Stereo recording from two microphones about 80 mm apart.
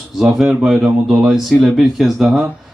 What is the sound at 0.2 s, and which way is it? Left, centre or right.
Speech, centre.